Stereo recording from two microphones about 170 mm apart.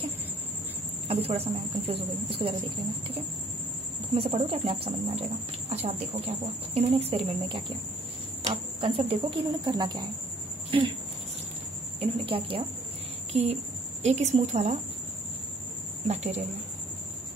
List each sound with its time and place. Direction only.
1.0 s speech: 35° right (ahead or behind)
4.1 s speech: 35° right (ahead or behind)
12.0 s a woman's voice: 30° right (ahead or behind)
16.1 s speech: 40° right (ahead or behind)